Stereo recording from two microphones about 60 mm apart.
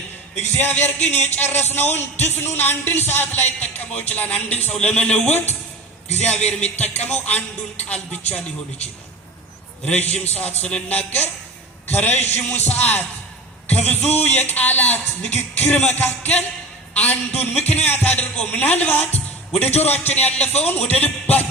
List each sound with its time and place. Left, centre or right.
0.6 s a man's voice: left
6.2 s a man's voice: left
9.8 s a man's voice: left
11.9 s a man's voice: left